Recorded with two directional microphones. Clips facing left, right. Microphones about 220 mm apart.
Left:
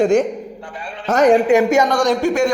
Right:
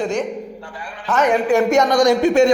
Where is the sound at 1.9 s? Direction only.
15° right (ahead or behind).